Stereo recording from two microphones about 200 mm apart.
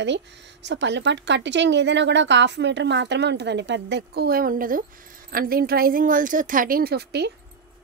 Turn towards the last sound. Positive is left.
turn(degrees=-55)  # may be behind; listen again after turning